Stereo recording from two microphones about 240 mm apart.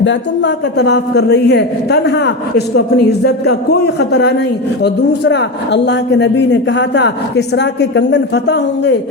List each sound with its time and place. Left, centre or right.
0.0 s a man's voice: left